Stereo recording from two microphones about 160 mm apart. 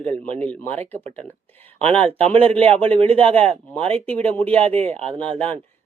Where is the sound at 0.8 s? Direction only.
45° right (ahead or behind).